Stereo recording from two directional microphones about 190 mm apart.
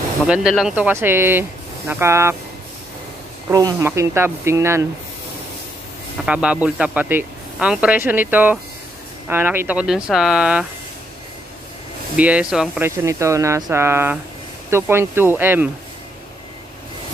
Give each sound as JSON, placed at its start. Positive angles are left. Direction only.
{"t": 0.3, "sound": "speech", "side_deg": -5}
{"t": 3.4, "sound": "speech", "side_deg": -15}
{"t": 6.2, "sound": "speech", "side_deg": -5}
{"t": 12.2, "sound": "speech", "side_deg": -5}